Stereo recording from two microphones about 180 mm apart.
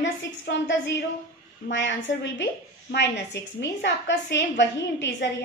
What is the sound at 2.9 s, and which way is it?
A woman's voice, 75° left (ahead or behind).